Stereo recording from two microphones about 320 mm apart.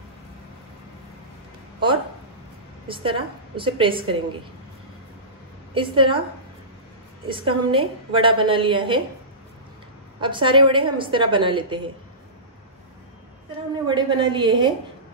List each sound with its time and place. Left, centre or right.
2.9 s a woman's voice: centre
5.8 s a woman's voice: centre
7.2 s a woman's voice: centre
10.2 s a woman's voice: centre
13.8 s a woman's voice: centre